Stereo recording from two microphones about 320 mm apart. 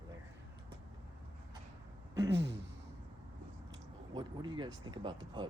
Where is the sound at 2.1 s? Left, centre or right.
Right.